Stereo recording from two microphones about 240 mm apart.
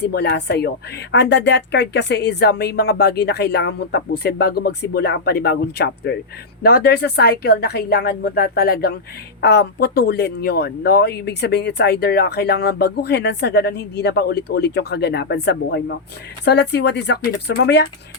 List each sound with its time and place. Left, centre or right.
0.0 s a woman's voice: left